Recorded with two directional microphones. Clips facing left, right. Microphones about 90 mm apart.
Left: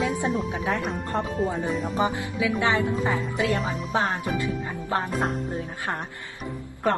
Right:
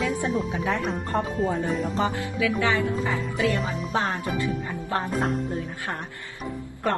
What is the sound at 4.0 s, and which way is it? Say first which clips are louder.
A woman's voice: left 1 dB; 20° left (ahead or behind).